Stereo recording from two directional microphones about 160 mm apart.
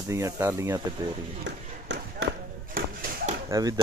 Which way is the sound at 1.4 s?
90° right.